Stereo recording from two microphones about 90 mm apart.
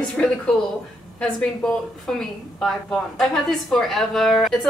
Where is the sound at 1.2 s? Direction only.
10° left (ahead or behind).